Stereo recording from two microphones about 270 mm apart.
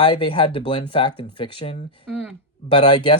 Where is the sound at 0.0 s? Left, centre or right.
Centre.